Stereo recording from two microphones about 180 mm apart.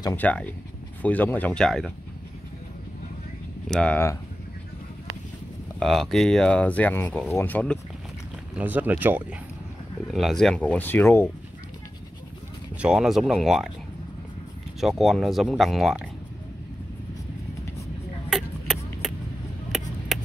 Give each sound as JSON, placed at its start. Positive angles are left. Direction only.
{"t": 0.0, "sound": "speech", "side_deg": 10}
{"t": 3.6, "sound": "speech", "side_deg": 5}
{"t": 5.8, "sound": "speech", "side_deg": 0}
{"t": 8.5, "sound": "speech", "side_deg": -10}
{"t": 10.1, "sound": "speech", "side_deg": 0}
{"t": 12.8, "sound": "speech", "side_deg": -5}
{"t": 14.8, "sound": "speech", "side_deg": 0}
{"t": 18.3, "sound": "a sound", "side_deg": 0}